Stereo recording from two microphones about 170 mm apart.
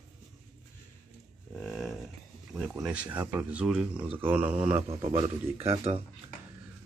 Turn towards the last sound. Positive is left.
turn(degrees=-35)  # may be behind; listen again after turning